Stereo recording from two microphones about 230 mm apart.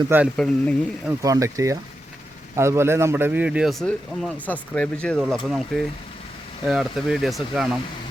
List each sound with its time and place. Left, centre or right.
0.1 s speech: centre
1.0 s speech: centre